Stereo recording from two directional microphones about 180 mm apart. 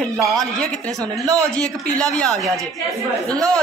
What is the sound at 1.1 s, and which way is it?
Speech, 20° right (ahead or behind).